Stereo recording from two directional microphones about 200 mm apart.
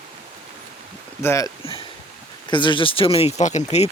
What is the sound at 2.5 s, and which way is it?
Speech, 25° left (ahead or behind).